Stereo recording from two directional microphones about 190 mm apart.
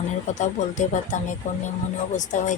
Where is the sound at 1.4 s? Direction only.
40° left (ahead or behind).